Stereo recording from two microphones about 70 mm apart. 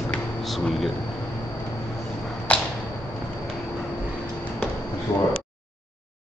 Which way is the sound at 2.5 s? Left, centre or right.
Left.